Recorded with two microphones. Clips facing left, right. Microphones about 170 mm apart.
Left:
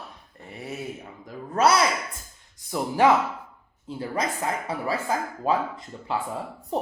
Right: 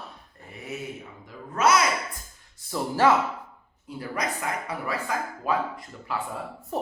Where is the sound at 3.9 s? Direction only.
25° left (ahead or behind).